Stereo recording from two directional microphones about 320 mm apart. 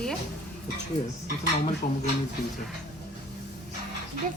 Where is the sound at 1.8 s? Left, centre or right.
Left.